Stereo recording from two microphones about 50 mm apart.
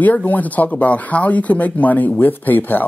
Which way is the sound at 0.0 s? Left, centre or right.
Left.